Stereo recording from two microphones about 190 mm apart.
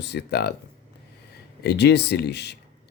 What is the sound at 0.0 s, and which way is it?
Speech, 60° left (ahead or behind).